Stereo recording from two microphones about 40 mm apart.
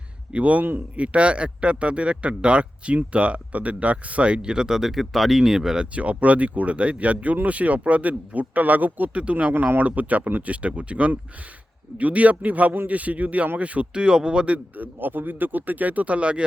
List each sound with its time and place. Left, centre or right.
0.3 s speech: right; by 5.8 s centre
5.8 s speech: right
9.1 s speech: right
9.5 s speech: right
9.8 s speech: right
14.8 s speech: right